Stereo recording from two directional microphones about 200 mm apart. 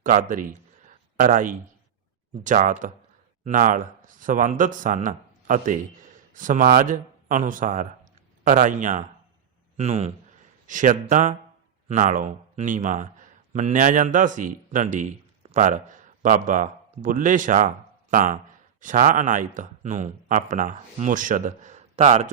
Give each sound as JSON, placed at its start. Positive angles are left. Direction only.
{"t": 0.0, "sound": "speech", "side_deg": -40}
{"t": 0.9, "sound": "a sound", "side_deg": -40}
{"t": 2.4, "sound": "speech", "side_deg": -40}